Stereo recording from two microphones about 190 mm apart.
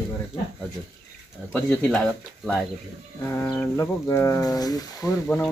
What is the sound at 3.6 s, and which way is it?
Speech, 15° left (ahead or behind).